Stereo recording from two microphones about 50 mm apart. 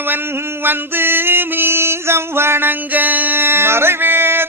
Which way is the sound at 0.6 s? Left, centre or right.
Right.